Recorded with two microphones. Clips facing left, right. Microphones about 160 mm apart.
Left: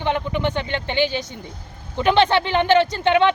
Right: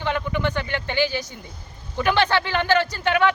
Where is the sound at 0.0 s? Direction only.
20° left (ahead or behind).